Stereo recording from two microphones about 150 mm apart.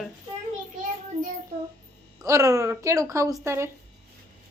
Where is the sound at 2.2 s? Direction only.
20° right (ahead or behind).